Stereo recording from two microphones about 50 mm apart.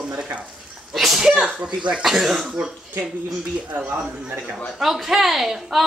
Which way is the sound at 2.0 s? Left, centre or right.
Centre.